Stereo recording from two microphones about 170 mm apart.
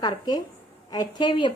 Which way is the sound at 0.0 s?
25° left (ahead or behind).